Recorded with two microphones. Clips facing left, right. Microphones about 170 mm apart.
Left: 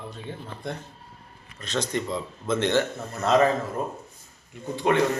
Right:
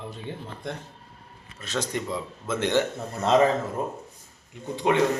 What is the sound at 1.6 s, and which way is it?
A man's voice, 10° right (ahead or behind).